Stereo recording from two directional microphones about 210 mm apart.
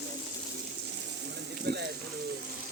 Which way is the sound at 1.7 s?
50° right (ahead or behind).